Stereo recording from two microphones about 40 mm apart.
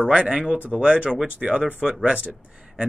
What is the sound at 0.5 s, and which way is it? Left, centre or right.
Speech, right.